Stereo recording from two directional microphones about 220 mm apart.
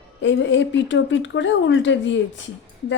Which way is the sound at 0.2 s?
55° left (ahead or behind).